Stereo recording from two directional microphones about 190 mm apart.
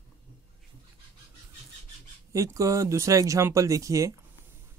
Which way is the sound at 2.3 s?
15° right (ahead or behind).